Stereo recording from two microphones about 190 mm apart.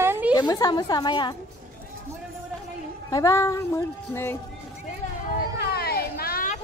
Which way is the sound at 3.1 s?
15° left (ahead or behind).